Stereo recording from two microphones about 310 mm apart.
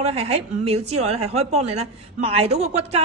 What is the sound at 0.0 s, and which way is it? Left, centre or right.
A woman's voice, centre.